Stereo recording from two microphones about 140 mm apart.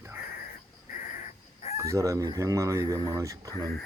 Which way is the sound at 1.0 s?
60° left (ahead or behind).